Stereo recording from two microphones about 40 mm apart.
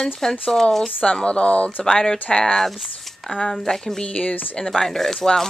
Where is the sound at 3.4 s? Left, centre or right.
Centre.